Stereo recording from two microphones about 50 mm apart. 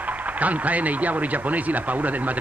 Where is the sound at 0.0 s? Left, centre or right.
Right.